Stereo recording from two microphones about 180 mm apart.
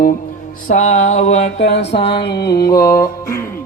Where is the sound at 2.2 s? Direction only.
65° left (ahead or behind).